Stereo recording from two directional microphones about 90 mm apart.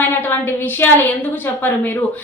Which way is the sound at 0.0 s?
25° left (ahead or behind).